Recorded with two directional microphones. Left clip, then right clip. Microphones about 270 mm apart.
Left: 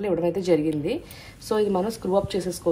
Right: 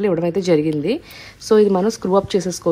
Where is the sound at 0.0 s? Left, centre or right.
Right.